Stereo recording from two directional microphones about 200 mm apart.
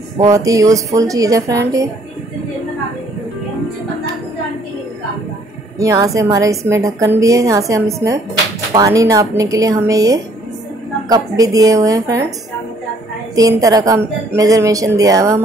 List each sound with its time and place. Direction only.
0.2 s a woman's voice: 15° right (ahead or behind)
5.8 s a woman's voice: 15° right (ahead or behind)
13.3 s a woman's voice: 15° right (ahead or behind)